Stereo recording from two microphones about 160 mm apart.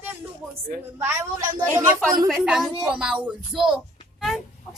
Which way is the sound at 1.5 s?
15° right (ahead or behind).